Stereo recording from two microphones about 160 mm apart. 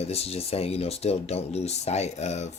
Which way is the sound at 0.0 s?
40° left (ahead or behind).